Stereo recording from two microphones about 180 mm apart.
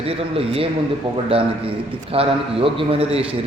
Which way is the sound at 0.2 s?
30° right (ahead or behind).